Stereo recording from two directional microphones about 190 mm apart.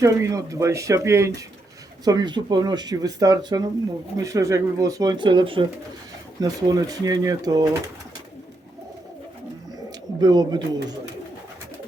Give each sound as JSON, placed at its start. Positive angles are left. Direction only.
{"t": 0.0, "sound": "speech", "side_deg": -15}
{"t": 10.2, "sound": "speech", "side_deg": -20}